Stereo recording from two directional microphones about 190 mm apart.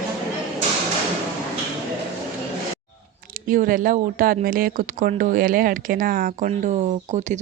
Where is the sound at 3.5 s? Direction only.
45° right (ahead or behind).